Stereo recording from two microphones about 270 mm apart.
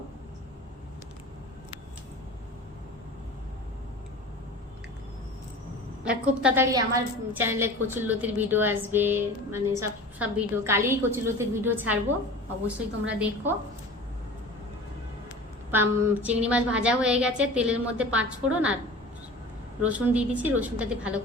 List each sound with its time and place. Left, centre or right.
6.1 s a woman's voice: centre
15.7 s a woman's voice: centre
19.8 s a woman's voice: centre